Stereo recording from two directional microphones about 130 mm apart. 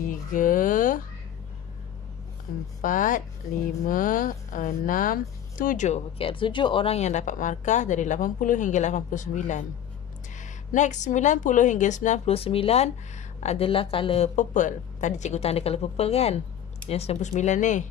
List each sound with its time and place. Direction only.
0.3 s speech: 90° left
2.8 s speech: 90° left; by 7.0 s 40° left (ahead or behind)
7.0 s speech: 65° left (ahead or behind)
12.4 s speech: 50° left (ahead or behind)
13.7 s speech: 45° left (ahead or behind)
14.3 s a woman's voice: 75° left (ahead or behind)